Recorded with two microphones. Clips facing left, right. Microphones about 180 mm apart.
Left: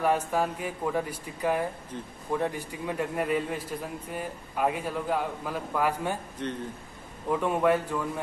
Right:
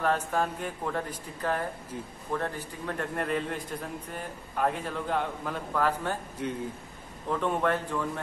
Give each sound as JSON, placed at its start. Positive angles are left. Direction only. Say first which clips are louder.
{"t": 0.0, "sound": "a man's voice", "louder": "left 2 dB", "side_deg": 10}
{"t": 6.4, "sound": "a man's voice", "louder": "right 1 dB", "side_deg": -10}
{"t": 7.2, "sound": "a man's voice", "louder": "left 3 dB", "side_deg": 10}